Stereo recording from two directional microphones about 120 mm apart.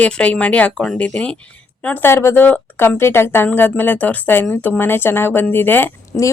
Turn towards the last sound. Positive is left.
turn(degrees=15)  # may be behind; listen again after turning